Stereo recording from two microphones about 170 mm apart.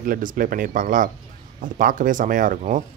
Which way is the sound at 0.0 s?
55° right (ahead or behind).